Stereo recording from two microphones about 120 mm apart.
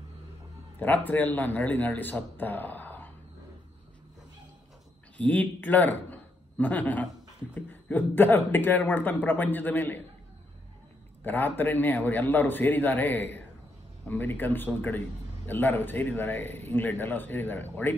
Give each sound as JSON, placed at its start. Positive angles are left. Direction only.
{"t": 0.7, "sound": "a man's voice", "side_deg": 15}
{"t": 5.1, "sound": "a man's voice", "side_deg": 10}
{"t": 11.2, "sound": "a man's voice", "side_deg": 15}